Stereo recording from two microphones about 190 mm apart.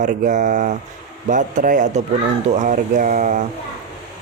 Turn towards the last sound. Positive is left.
turn(degrees=-40)  # may be behind; listen again after turning